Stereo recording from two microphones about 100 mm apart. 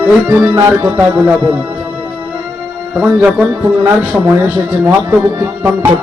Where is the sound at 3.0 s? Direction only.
15° right (ahead or behind).